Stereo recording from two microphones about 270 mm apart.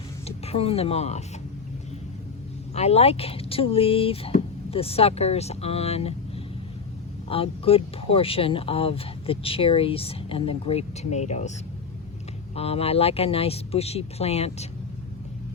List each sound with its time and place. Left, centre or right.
0.3 s speech: left
2.7 s speech: left
7.3 s speech: left
12.5 s speech: left